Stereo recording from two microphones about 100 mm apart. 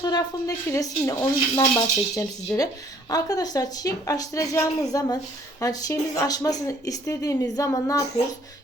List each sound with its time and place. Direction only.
0.0 s a woman's voice: 45° left (ahead or behind)